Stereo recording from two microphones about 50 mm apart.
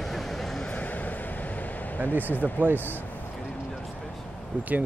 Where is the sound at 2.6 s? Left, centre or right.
Right.